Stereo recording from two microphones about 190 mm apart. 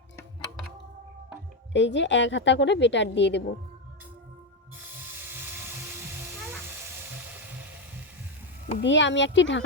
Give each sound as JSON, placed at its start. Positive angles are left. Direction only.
{"t": 1.7, "sound": "a woman's voice", "side_deg": 70}
{"t": 4.8, "sound": "a sound", "side_deg": -10}
{"t": 8.8, "sound": "a woman's voice", "side_deg": 70}